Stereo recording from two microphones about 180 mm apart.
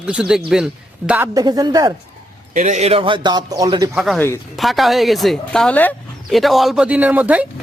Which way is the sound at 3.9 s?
Centre (ahead or behind).